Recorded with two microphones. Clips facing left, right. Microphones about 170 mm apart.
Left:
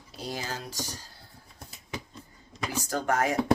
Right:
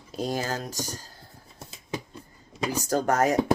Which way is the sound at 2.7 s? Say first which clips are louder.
Right 3 dB; 40° right (ahead or behind).